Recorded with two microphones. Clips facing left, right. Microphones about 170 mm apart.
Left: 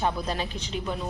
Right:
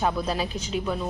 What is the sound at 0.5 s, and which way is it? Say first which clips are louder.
Speech: right 4 dB; 35° left (ahead or behind).